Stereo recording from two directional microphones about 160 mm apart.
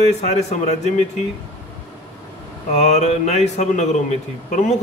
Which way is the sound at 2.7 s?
45° left (ahead or behind).